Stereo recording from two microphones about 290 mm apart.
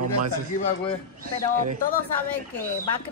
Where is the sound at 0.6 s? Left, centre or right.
Centre.